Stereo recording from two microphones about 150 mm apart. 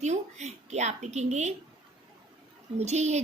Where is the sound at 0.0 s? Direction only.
50° right (ahead or behind).